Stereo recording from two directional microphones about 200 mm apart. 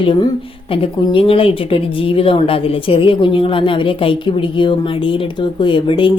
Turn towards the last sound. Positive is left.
turn(degrees=25)  # may be behind; listen again after turning